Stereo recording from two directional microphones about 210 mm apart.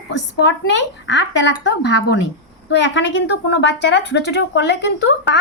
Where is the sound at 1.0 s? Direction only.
60° left (ahead or behind).